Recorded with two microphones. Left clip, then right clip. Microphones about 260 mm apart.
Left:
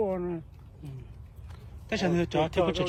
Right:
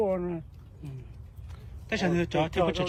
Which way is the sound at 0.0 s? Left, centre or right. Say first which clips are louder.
Right 2 dB; right.